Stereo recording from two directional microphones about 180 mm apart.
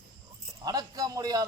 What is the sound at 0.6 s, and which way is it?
Speech, 20° right (ahead or behind).